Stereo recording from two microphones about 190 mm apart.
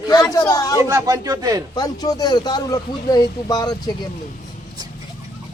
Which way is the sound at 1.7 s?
20° left (ahead or behind).